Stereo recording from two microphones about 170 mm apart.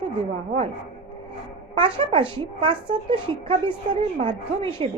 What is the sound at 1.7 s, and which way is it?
A woman's voice, 30° right (ahead or behind).